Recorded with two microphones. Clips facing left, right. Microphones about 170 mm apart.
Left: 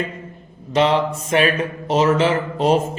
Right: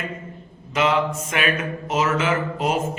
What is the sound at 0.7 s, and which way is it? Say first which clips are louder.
Speech: left 4 dB; 30° left (ahead or behind).